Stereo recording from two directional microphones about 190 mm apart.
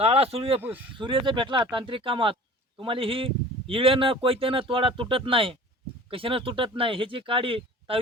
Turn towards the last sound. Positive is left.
turn(degrees=-30)  # may be behind; listen again after turning